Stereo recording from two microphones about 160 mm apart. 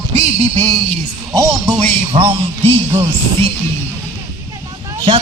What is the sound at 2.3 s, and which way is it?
Music, 35° right (ahead or behind).